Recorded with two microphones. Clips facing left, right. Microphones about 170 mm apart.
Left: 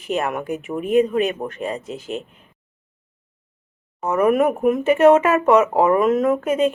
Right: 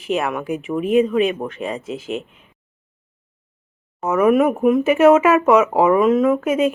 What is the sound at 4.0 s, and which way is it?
Speech, 5° right (ahead or behind).